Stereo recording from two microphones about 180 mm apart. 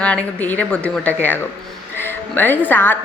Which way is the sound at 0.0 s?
5° left (ahead or behind).